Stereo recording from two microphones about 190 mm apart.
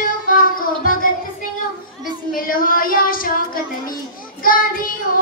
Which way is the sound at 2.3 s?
50° left (ahead or behind).